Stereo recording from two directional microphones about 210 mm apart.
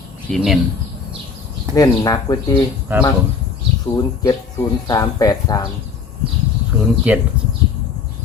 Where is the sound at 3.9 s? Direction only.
15° left (ahead or behind).